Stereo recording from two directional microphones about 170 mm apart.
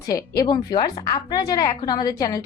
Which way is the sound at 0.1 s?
20° left (ahead or behind).